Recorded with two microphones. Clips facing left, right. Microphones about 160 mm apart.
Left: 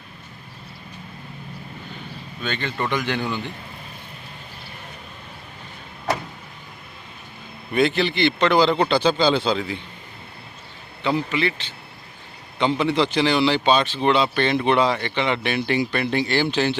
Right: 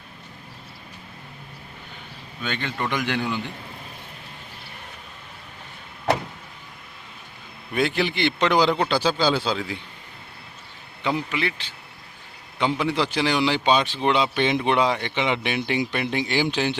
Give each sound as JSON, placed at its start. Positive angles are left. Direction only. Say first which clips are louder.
{"t": 2.4, "sound": "speech", "louder": "left 2 dB", "side_deg": -10}
{"t": 7.7, "sound": "speech", "louder": "left 3 dB", "side_deg": -5}
{"t": 11.0, "sound": "speech", "louder": "left 3 dB", "side_deg": -10}